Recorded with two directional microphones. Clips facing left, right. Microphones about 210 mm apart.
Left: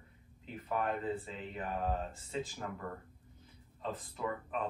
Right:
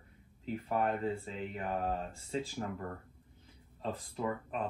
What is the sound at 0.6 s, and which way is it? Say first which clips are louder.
Speech: right 2 dB; 30° right (ahead or behind).